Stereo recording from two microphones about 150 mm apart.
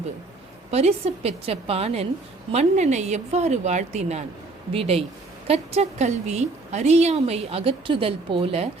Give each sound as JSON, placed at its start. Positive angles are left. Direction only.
{"t": 0.7, "sound": "a woman's voice", "side_deg": -45}